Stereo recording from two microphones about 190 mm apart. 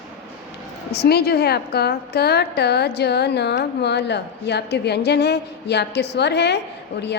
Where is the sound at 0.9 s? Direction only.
55° left (ahead or behind).